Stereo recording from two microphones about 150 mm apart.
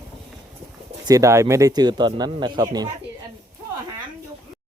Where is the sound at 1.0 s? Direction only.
20° right (ahead or behind).